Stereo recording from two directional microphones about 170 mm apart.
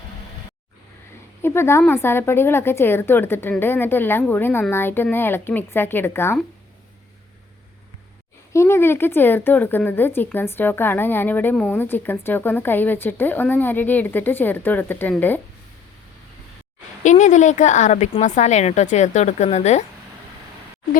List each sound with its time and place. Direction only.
1.4 s a woman's voice: 15° left (ahead or behind)
8.5 s speech: 15° left (ahead or behind)
17.0 s speech: 45° left (ahead or behind)